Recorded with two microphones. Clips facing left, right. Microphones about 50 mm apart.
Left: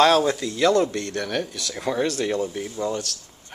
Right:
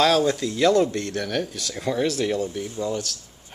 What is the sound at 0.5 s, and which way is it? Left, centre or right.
Speech, centre.